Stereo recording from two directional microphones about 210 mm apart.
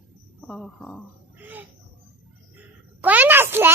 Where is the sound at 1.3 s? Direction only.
10° right (ahead or behind).